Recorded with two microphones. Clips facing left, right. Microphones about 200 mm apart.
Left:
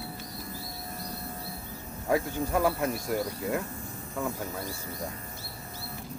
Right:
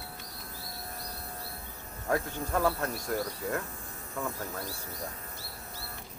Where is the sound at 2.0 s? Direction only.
10° left (ahead or behind).